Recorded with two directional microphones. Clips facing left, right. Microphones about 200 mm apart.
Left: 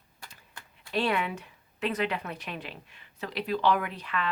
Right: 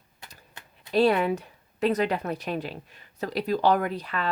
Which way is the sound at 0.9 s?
35° right (ahead or behind).